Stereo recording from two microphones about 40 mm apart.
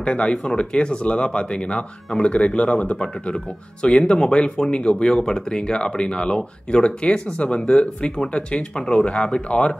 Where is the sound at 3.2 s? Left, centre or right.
Left.